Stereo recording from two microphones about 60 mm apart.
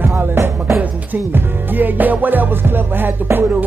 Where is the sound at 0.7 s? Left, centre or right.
Right.